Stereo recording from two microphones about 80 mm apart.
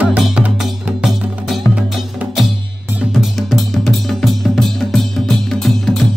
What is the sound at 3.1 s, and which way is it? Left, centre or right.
Drum, centre.